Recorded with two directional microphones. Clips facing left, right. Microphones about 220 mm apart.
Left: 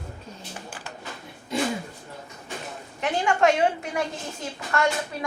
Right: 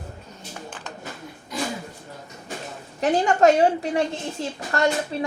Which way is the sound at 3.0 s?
40° right (ahead or behind).